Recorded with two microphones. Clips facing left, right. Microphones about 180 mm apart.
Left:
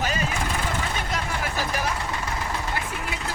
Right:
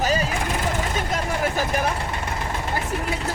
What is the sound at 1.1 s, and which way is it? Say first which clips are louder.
Speech: right 7 dB; 50° right (ahead or behind).